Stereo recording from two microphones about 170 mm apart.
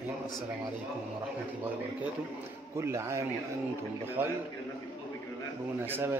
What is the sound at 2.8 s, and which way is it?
Speech, 15° right (ahead or behind).